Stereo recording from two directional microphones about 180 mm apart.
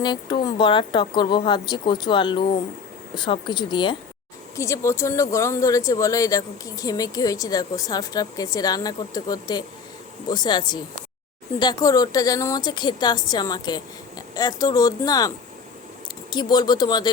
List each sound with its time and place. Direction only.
0.0 s speech: 25° left (ahead or behind)
16.3 s speech: 25° left (ahead or behind)